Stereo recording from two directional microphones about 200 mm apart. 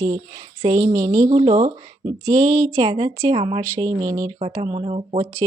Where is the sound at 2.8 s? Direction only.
25° right (ahead or behind).